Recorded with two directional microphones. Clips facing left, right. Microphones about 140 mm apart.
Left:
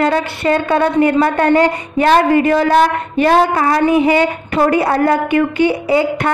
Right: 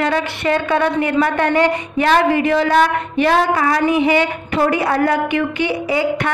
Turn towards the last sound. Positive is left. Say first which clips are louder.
# left 5 dB
turn(degrees=40)  # may be behind; listen again after turning